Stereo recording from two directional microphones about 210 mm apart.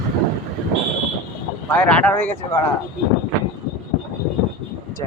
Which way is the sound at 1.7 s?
5° left (ahead or behind).